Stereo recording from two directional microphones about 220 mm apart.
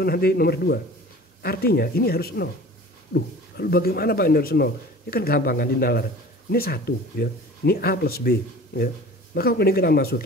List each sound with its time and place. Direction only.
0.0 s speech: 45° left (ahead or behind)